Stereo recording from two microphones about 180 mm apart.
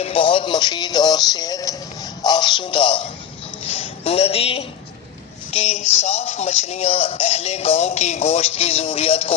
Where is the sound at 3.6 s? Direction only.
35° left (ahead or behind).